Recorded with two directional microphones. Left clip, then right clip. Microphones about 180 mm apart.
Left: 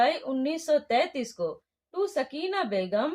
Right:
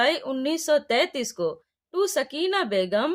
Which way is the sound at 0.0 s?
35° right (ahead or behind).